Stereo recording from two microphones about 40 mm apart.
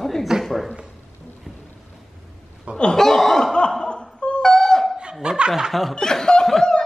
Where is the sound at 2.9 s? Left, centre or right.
Centre.